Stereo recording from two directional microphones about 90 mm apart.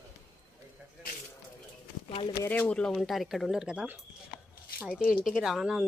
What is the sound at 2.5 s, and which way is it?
Speech, 15° left (ahead or behind).